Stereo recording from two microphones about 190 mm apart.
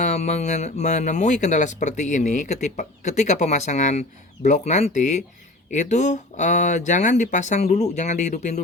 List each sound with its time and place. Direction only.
0.0 s speech: 35° left (ahead or behind)